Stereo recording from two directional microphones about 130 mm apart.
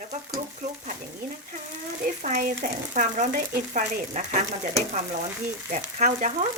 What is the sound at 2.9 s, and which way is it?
Speech, 70° right (ahead or behind).